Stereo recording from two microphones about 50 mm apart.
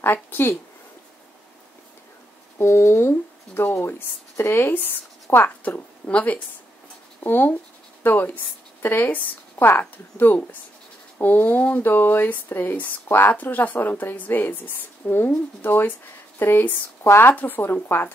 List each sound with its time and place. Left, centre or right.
0.0 s speech: left
2.6 s speech: left
4.6 s speech: left
5.6 s speech: left
7.2 s a woman's voice: left